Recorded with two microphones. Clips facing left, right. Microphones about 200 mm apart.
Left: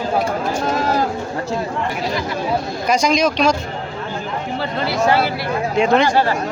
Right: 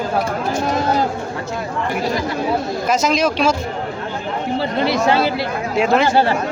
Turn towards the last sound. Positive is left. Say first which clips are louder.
# even
turn(degrees=-5)  # may be behind; listen again after turning